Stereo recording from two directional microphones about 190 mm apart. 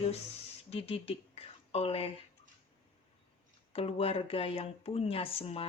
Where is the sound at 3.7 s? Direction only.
30° left (ahead or behind).